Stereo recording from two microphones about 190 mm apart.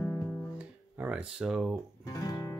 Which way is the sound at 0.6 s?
5° right (ahead or behind).